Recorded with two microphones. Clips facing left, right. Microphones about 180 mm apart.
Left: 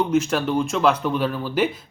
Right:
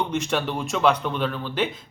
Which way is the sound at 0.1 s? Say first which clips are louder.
Left 5 dB; centre (ahead or behind).